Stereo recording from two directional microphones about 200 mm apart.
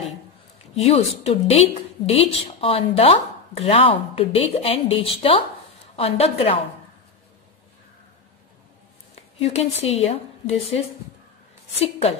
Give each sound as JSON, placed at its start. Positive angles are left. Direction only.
{"t": 0.7, "sound": "a woman's voice", "side_deg": 30}
{"t": 9.4, "sound": "a woman's voice", "side_deg": 30}
{"t": 11.8, "sound": "a woman's voice", "side_deg": 30}